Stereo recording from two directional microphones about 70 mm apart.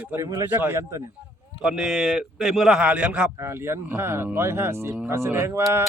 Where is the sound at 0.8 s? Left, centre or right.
Right.